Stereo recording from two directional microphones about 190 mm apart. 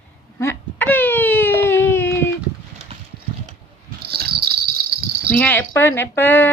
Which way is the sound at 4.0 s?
55° right (ahead or behind).